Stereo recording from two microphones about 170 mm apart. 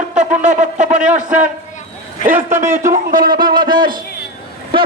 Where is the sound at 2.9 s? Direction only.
55° right (ahead or behind).